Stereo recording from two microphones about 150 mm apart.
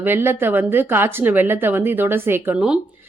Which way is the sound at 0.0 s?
15° right (ahead or behind).